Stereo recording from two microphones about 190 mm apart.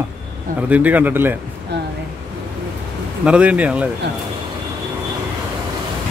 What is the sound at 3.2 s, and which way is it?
Speech, 5° right (ahead or behind).